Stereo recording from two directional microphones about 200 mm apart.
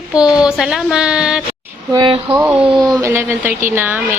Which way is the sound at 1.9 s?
25° right (ahead or behind).